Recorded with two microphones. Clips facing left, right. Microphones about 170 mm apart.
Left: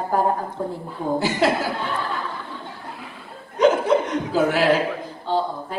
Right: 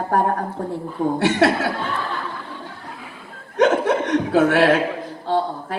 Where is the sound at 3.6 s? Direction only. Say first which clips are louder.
Even; 75° right (ahead or behind).